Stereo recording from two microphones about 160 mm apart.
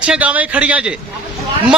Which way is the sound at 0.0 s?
5° right (ahead or behind).